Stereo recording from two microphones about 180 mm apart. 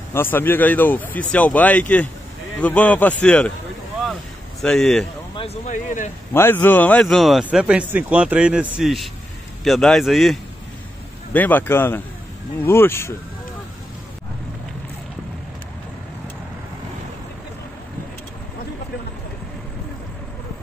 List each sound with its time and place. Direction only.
0.1 s speech: 10° left (ahead or behind)
4.0 s vehicle: centre (ahead or behind)
5.3 s a sound: 30° left (ahead or behind)
6.3 s speech: 10° left (ahead or behind)